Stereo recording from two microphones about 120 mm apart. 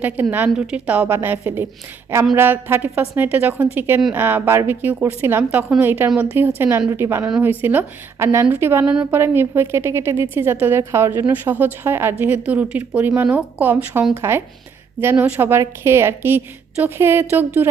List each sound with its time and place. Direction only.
0.0 s a woman's voice: 15° right (ahead or behind)